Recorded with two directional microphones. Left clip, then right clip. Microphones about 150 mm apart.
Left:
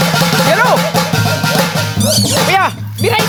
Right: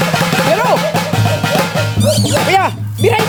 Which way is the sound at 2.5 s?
25° right (ahead or behind).